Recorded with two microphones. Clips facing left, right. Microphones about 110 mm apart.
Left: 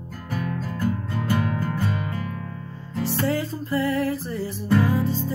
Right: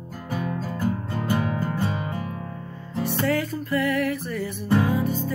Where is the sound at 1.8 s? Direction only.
15° right (ahead or behind).